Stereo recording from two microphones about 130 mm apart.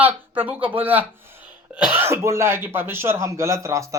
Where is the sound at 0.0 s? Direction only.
15° right (ahead or behind).